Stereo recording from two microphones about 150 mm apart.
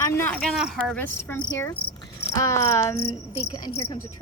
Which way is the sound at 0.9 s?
10° left (ahead or behind).